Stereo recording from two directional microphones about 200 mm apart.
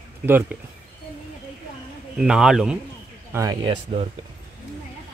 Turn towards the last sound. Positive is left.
turn(degrees=-30)  # may be behind; listen again after turning